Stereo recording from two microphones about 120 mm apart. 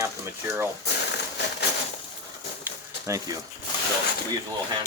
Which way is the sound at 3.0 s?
25° right (ahead or behind).